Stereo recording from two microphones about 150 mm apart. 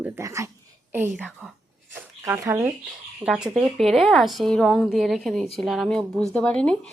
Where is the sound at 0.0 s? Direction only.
20° right (ahead or behind).